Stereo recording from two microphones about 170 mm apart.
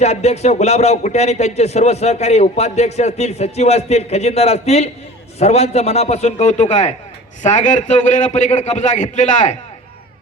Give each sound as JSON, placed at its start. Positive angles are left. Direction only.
{"t": 0.0, "sound": "a man's voice", "side_deg": 40}